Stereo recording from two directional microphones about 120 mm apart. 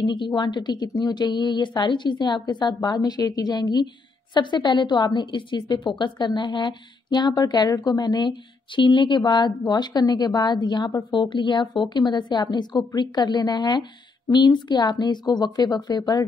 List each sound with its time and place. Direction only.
0.0 s a woman's voice: 40° left (ahead or behind)